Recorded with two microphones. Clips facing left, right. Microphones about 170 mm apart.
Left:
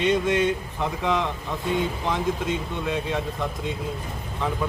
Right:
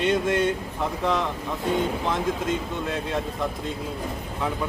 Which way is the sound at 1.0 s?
Centre (ahead or behind).